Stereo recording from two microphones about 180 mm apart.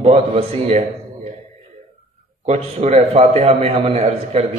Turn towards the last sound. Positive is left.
turn(degrees=-35)  # may be behind; listen again after turning